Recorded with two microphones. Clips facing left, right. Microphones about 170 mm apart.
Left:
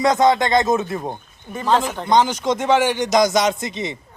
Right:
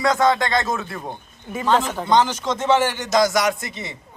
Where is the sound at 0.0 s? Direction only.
20° left (ahead or behind).